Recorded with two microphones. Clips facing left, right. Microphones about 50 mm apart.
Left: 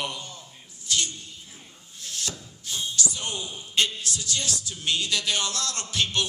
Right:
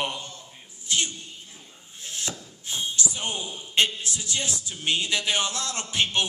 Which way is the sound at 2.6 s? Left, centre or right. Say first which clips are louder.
Right 1 dB; right.